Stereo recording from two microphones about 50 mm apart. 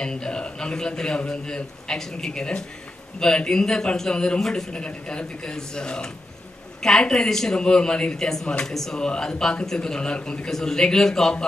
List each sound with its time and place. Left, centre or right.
0.0 s a man's voice: centre
4.7 s a man's voice: centre